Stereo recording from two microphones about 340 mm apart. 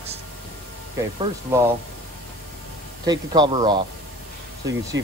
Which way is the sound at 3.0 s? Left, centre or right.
Centre.